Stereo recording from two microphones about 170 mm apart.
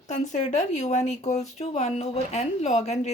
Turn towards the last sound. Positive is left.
turn(degrees=40)  # may be behind; listen again after turning